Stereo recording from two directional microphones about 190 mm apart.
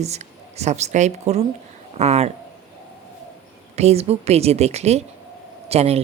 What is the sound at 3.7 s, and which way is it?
A man's voice, 35° right (ahead or behind).